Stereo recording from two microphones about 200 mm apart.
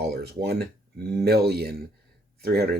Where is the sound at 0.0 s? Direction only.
50° right (ahead or behind).